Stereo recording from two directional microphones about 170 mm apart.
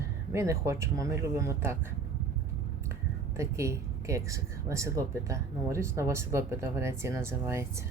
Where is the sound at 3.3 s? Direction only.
15° right (ahead or behind).